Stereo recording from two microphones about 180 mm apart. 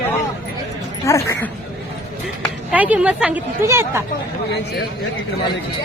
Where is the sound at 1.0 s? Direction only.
15° left (ahead or behind).